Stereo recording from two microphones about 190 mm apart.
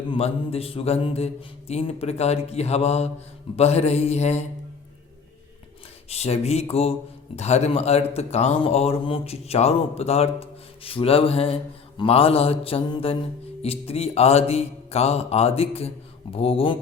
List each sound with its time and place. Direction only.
0.1 s speech: 30° left (ahead or behind)
6.1 s speech: 35° left (ahead or behind)